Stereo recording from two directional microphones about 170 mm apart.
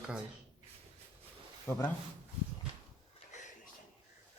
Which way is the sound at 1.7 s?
15° left (ahead or behind).